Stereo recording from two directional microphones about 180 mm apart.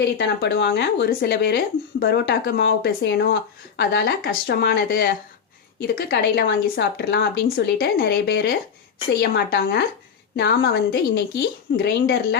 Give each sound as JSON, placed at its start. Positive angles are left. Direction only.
{"t": 0.2, "sound": "speech", "side_deg": 65}